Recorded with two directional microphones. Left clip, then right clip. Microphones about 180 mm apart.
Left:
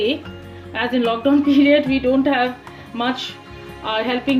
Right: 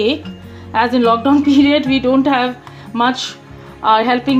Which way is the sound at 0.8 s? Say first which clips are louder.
Right 7 dB; 30° right (ahead or behind).